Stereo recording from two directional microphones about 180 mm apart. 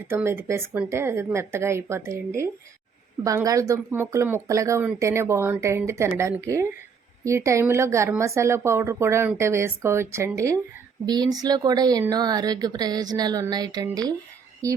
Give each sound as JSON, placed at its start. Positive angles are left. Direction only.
{"t": 0.1, "sound": "speech", "side_deg": -10}